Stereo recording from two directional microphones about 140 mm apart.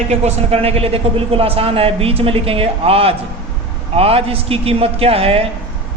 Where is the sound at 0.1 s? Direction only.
50° right (ahead or behind).